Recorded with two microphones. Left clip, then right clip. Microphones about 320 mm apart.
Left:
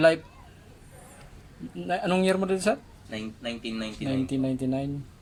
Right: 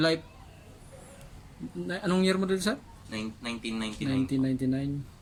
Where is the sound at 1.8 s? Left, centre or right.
Centre.